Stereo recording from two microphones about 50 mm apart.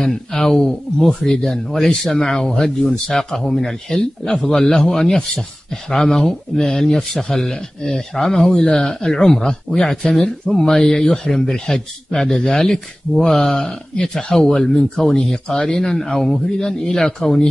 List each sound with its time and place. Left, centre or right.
0.0 s speech: centre